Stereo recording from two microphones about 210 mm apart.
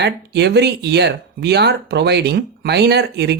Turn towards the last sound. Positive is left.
turn(degrees=-50)  # may be behind; listen again after turning